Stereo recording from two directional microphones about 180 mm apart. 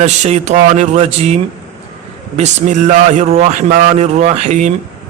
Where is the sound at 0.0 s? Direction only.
40° right (ahead or behind).